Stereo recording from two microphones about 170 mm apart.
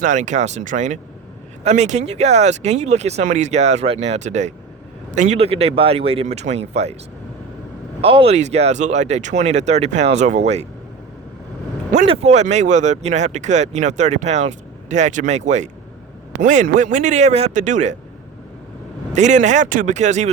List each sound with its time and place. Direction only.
0.0 s speech: 45° right (ahead or behind)
8.0 s speech: 35° right (ahead or behind)
11.9 s speech: 40° right (ahead or behind)
19.1 s speech: 45° right (ahead or behind)